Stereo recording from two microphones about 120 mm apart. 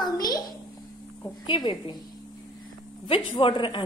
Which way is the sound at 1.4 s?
40° left (ahead or behind).